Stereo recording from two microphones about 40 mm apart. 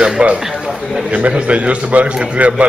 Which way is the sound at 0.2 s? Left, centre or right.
Right.